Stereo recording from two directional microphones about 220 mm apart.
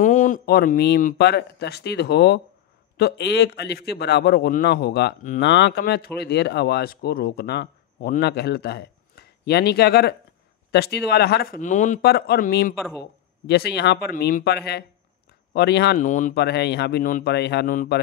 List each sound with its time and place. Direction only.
0.0 s speech: 35° left (ahead or behind)
16.1 s speech: 35° left (ahead or behind)